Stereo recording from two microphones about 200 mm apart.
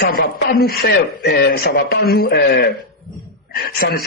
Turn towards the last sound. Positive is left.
turn(degrees=50)  # may be behind; listen again after turning